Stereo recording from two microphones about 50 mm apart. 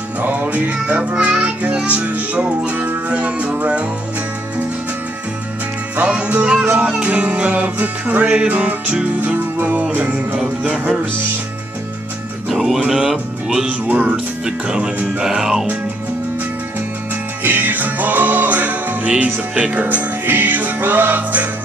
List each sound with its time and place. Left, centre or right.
0.2 s music: right
5.9 s music: right
12.4 s music: centre
13.7 s music: right
14.1 s speech: centre
15.2 s music: centre
17.4 s music: right